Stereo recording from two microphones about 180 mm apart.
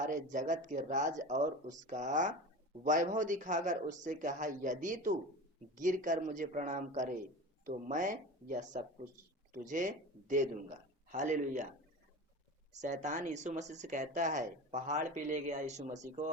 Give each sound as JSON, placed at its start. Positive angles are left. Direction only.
{"t": 0.0, "sound": "speech", "side_deg": -45}
{"t": 12.8, "sound": "speech", "side_deg": -40}